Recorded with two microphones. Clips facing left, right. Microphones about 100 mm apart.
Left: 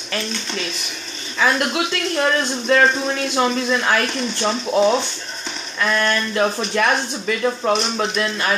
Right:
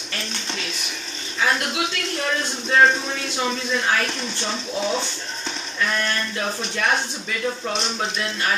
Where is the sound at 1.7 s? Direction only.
75° left (ahead or behind).